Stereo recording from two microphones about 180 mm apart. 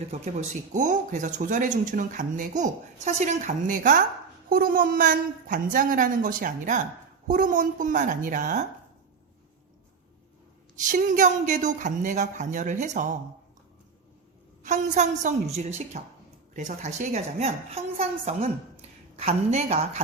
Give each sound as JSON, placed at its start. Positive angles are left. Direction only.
{"t": 0.1, "sound": "speech", "side_deg": -40}
{"t": 10.9, "sound": "speech", "side_deg": -45}
{"t": 14.6, "sound": "a woman's voice", "side_deg": -40}